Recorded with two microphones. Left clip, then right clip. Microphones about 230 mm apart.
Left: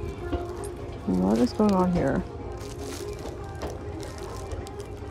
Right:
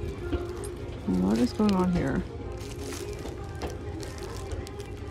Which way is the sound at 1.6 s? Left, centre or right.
Right.